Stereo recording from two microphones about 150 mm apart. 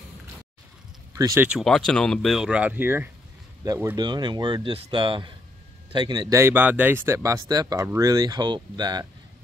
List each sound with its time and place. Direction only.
1.1 s speech: 25° right (ahead or behind)
1.4 s speech: centre (ahead or behind)
3.9 s speech: 30° right (ahead or behind)
6.4 s speech: 10° right (ahead or behind); by 9.0 s 30° right (ahead or behind)